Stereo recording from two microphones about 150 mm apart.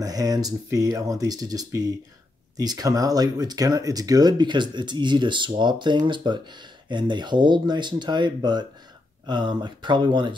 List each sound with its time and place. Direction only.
0.0 s speech: 25° right (ahead or behind)